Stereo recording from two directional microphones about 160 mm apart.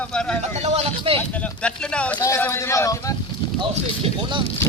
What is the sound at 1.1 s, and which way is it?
Speech, 10° left (ahead or behind).